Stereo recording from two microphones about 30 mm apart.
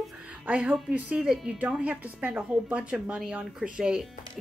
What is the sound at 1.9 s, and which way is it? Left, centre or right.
Speech, right.